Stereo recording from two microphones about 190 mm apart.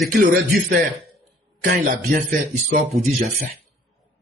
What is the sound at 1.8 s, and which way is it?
Speech, 45° right (ahead or behind).